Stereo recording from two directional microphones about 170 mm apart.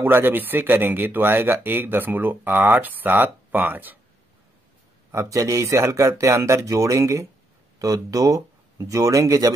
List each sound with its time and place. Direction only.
0.0 s speech: 10° right (ahead or behind)
5.1 s speech: 20° right (ahead or behind)